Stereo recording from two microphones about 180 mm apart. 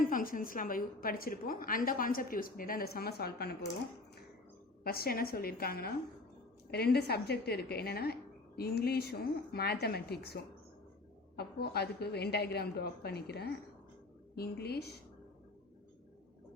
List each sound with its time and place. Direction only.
0.0 s a woman's voice: 50° left (ahead or behind)
4.8 s a woman's voice: 55° left (ahead or behind)
11.3 s a woman's voice: 60° left (ahead or behind)